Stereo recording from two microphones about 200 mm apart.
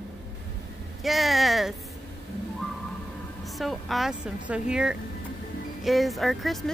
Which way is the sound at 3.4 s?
Centre (ahead or behind).